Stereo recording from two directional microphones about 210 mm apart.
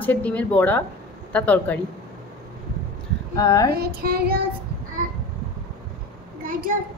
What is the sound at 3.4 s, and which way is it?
Speech, 15° left (ahead or behind).